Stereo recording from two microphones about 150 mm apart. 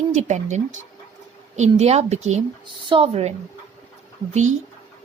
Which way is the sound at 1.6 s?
45° right (ahead or behind).